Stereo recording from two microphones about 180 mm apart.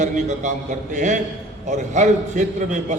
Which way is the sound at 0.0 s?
40° right (ahead or behind).